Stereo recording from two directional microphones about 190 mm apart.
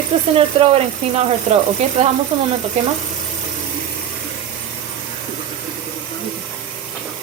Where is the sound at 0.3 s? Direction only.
30° right (ahead or behind).